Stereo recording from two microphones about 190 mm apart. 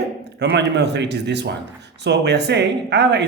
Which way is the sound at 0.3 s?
60° right (ahead or behind).